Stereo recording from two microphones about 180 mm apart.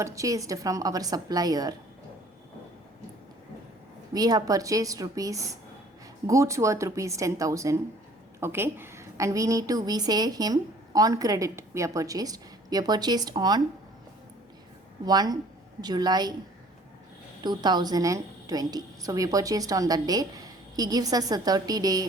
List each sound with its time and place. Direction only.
0.0 s a woman's voice: 15° right (ahead or behind)
4.1 s a woman's voice: 20° right (ahead or behind)
15.0 s a woman's voice: 20° right (ahead or behind)
17.4 s a woman's voice: 25° right (ahead or behind)